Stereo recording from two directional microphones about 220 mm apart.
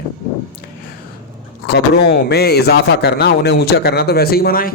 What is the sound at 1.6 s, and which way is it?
Speech, 50° left (ahead or behind).